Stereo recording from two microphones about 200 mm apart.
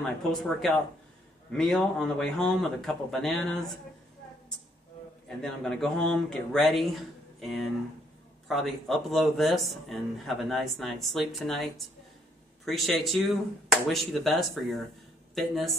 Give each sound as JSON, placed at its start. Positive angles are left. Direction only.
{"t": 0.0, "sound": "a man's voice", "side_deg": 5}
{"t": 5.4, "sound": "a man's voice", "side_deg": 5}